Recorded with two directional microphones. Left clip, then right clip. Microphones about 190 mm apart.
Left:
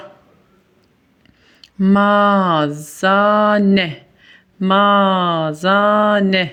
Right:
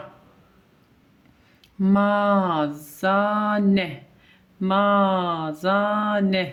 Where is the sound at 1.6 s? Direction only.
30° left (ahead or behind).